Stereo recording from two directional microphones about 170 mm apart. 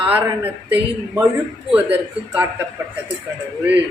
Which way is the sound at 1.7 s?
10° right (ahead or behind).